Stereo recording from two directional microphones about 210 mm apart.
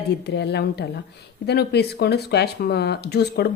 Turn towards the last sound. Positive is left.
turn(degrees=50)  # may be behind; listen again after turning